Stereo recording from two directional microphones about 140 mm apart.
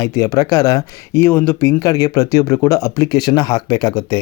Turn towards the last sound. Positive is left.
turn(degrees=30)  # may be behind; listen again after turning